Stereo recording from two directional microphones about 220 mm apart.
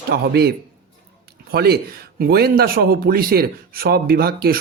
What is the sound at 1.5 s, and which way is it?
Speech, 45° right (ahead or behind).